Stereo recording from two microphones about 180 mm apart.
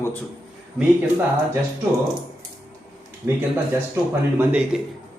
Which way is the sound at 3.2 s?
10° right (ahead or behind).